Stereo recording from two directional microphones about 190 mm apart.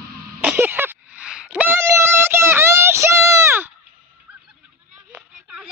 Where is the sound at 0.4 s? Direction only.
10° right (ahead or behind).